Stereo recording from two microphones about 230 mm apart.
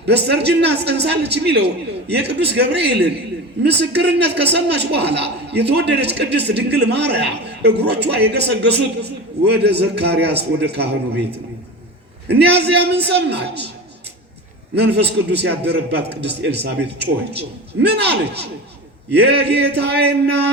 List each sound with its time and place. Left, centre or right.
0.1 s a man's voice: right
12.3 s a man's voice: right
14.8 s a man's voice: right